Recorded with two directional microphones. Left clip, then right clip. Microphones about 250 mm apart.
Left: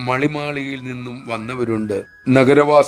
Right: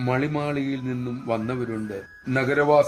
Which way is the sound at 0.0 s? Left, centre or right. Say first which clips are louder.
Left 5 dB; left.